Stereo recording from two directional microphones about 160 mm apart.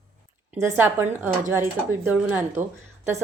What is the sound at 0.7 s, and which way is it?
A woman's voice, 15° right (ahead or behind).